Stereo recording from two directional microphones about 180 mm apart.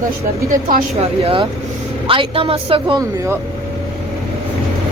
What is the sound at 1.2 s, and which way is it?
A woman's voice, 30° right (ahead or behind).